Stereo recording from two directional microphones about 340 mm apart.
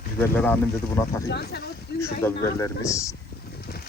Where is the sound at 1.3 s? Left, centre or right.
Left.